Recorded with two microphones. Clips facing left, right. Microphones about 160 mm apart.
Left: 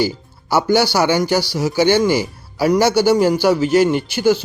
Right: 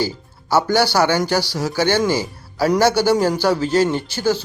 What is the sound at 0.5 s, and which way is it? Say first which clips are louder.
Speech: left 1 dB; 10° left (ahead or behind).